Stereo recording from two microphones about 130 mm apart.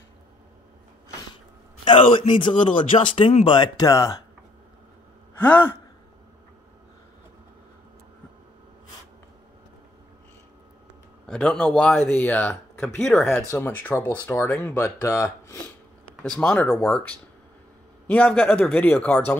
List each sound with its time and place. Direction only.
1.9 s speech: 40° left (ahead or behind)
5.4 s speech: 15° left (ahead or behind)
11.2 s speech: 5° left (ahead or behind); by 15.2 s 25° left (ahead or behind)
16.2 s speech: 10° left (ahead or behind)